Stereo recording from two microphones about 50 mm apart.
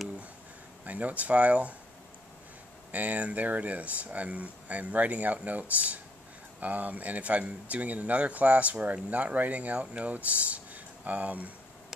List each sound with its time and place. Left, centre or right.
0.8 s speech: right
2.9 s speech: right